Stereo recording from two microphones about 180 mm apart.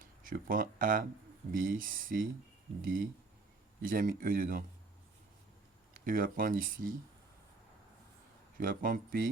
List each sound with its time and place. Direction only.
0.0 s speech: 50° right (ahead or behind)
5.9 s speech: 50° right (ahead or behind)
8.5 s speech: 50° right (ahead or behind)